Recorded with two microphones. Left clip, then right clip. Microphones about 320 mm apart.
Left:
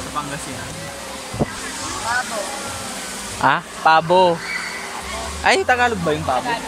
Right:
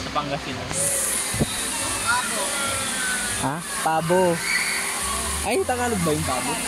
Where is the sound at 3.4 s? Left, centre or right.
Left.